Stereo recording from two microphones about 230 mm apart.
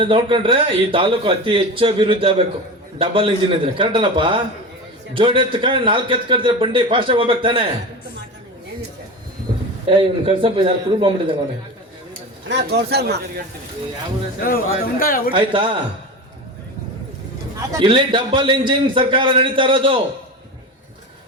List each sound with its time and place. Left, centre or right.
0.0 s a man's voice: right
9.8 s a man's voice: right
12.5 s speech: right
14.4 s speech: left
15.3 s a man's voice: right
17.7 s a man's voice: centre